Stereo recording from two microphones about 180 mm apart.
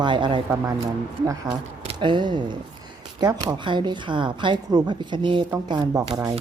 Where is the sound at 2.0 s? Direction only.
25° right (ahead or behind).